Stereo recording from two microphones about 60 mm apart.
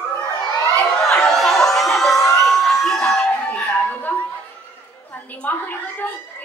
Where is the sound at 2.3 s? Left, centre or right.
Centre.